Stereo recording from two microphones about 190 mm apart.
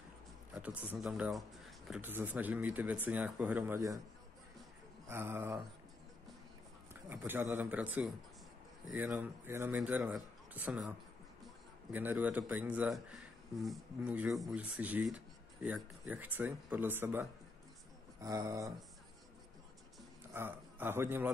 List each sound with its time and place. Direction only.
0.6 s speech: 5° right (ahead or behind)
5.0 s speech: 10° right (ahead or behind)
7.1 s a man's voice: 10° right (ahead or behind)
18.2 s a sound: 20° right (ahead or behind)
20.3 s a man's voice: 10° right (ahead or behind)